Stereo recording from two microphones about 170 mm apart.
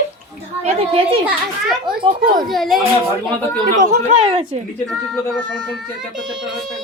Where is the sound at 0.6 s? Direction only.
35° right (ahead or behind).